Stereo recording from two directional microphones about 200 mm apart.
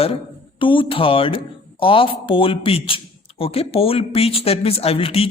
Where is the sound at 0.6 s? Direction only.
25° left (ahead or behind).